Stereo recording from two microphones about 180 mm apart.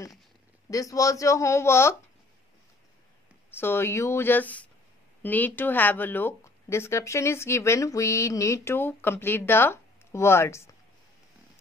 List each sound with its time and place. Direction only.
0.7 s speech: 20° left (ahead or behind)
3.5 s speech: 15° left (ahead or behind)